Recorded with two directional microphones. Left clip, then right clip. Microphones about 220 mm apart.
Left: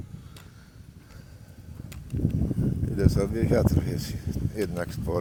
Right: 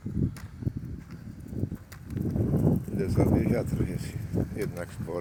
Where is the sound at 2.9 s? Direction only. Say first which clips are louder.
Left 2 dB; 35° left (ahead or behind).